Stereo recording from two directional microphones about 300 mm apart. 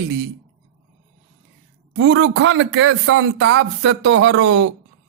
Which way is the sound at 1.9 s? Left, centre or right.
Right.